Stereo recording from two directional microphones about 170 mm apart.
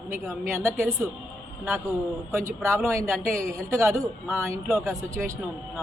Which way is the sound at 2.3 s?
15° right (ahead or behind).